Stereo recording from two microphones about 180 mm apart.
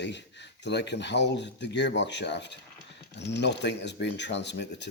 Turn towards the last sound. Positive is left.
turn(degrees=75)  # may be behind; listen again after turning